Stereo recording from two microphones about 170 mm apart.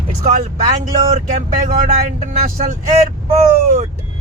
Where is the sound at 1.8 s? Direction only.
50° right (ahead or behind).